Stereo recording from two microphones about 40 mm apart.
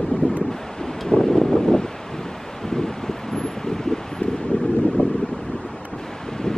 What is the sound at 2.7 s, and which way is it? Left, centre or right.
Wind, centre.